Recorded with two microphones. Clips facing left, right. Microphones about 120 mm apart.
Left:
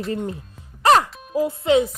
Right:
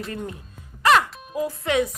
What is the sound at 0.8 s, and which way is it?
Speech, 30° left (ahead or behind).